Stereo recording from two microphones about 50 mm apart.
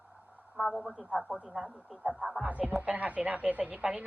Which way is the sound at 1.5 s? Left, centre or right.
Right.